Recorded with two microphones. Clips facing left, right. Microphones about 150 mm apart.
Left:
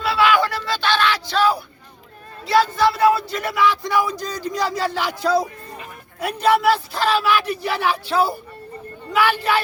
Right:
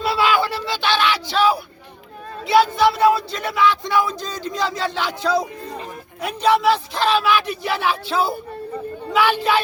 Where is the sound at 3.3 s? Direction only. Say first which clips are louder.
Even; 10° left (ahead or behind).